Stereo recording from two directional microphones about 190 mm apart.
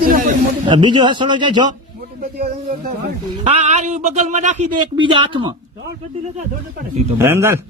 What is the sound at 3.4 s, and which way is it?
Speech, 35° right (ahead or behind).